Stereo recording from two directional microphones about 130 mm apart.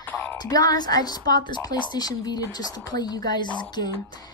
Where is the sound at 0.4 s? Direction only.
30° left (ahead or behind).